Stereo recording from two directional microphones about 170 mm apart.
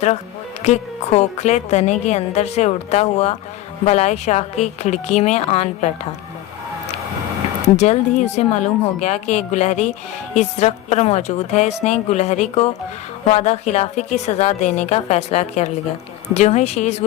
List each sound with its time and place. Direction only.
0.6 s a woman's voice: 40° left (ahead or behind)
7.8 s a woman's voice: 40° left (ahead or behind)